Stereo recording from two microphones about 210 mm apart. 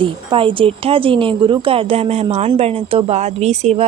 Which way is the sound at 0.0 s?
25° right (ahead or behind).